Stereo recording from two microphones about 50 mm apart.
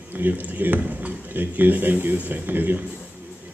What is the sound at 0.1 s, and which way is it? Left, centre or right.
A man's voice, right.